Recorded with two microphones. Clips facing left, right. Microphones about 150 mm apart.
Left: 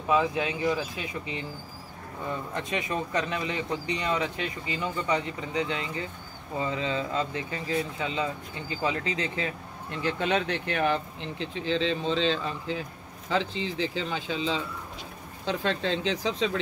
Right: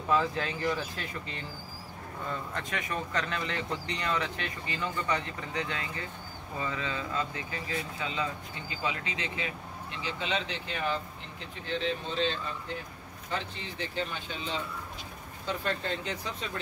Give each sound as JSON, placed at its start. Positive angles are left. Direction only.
{"t": 0.1, "sound": "speech", "side_deg": 15}
{"t": 10.0, "sound": "speech", "side_deg": 55}